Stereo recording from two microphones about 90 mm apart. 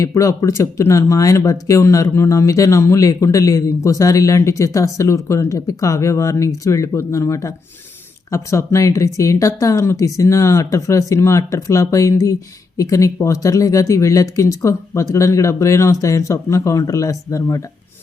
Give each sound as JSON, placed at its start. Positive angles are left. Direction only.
{"t": 0.0, "sound": "speech", "side_deg": 35}